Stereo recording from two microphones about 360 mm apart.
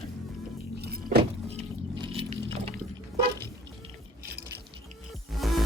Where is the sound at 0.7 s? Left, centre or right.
Right.